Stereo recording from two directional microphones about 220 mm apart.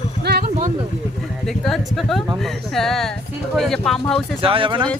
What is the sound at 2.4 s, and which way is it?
Speech, centre (ahead or behind).